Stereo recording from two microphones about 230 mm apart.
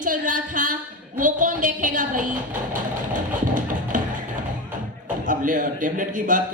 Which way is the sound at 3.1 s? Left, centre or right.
Right.